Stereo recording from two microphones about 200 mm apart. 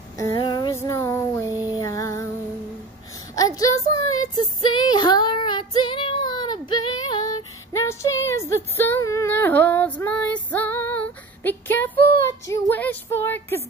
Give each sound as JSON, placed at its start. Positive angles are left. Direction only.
{"t": 0.2, "sound": "a sound", "side_deg": 20}
{"t": 1.4, "sound": "a sound", "side_deg": -15}
{"t": 1.8, "sound": "female singing", "side_deg": 15}
{"t": 3.3, "sound": "a child's voice", "side_deg": 15}
{"t": 4.2, "sound": "female singing", "side_deg": 20}
{"t": 12.4, "sound": "a woman's voice", "side_deg": 15}